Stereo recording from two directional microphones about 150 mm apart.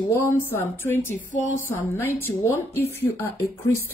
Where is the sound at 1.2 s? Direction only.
55° left (ahead or behind).